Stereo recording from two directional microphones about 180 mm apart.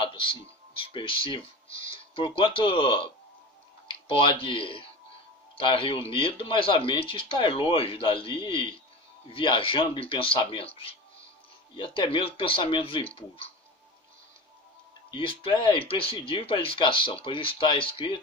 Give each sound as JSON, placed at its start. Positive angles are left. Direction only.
{"t": 0.0, "sound": "music", "side_deg": 30}
{"t": 0.8, "sound": "speech", "side_deg": 30}
{"t": 15.1, "sound": "speech", "side_deg": 30}